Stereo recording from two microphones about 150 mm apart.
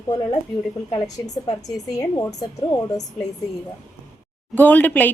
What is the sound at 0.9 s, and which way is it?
A woman's voice, 25° left (ahead or behind).